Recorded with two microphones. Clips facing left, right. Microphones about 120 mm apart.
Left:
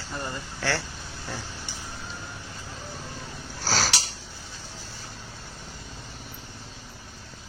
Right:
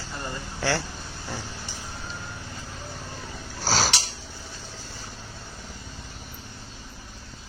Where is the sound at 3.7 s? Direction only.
20° right (ahead or behind).